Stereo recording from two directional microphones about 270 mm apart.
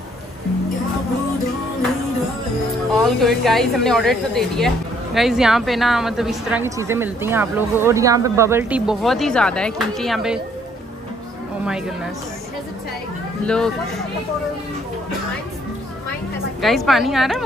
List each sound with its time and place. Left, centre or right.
2.9 s a woman's voice: centre
11.6 s a woman's voice: centre
13.5 s a woman's voice: centre
16.6 s a woman's voice: centre